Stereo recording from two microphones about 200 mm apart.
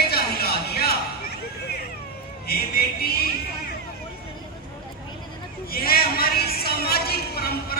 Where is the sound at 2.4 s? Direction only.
50° left (ahead or behind).